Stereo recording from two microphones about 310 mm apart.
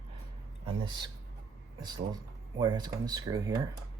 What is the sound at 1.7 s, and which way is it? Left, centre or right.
Speech, centre.